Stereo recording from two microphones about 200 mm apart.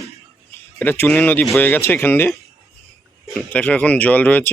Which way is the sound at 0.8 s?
10° left (ahead or behind).